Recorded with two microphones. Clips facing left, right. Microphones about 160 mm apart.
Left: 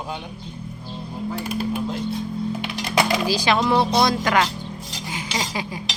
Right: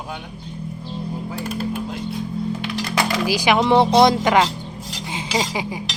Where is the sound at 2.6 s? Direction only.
15° left (ahead or behind).